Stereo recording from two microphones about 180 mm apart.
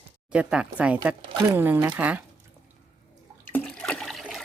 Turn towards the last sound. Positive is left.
turn(degrees=0)  # may be behind; listen again after turning